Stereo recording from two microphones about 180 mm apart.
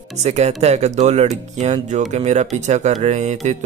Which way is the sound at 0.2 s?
40° right (ahead or behind).